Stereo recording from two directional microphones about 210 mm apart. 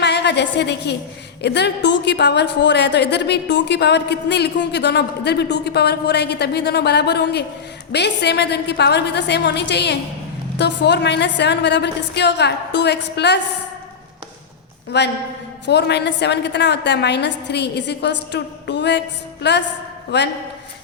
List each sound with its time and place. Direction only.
0.0 s a woman's voice: 55° left (ahead or behind)
14.9 s a woman's voice: 55° left (ahead or behind)